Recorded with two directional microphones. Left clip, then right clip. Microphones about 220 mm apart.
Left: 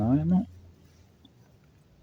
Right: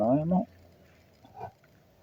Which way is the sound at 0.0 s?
20° left (ahead or behind).